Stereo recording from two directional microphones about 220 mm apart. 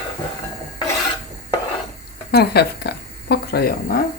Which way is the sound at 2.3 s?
45° left (ahead or behind).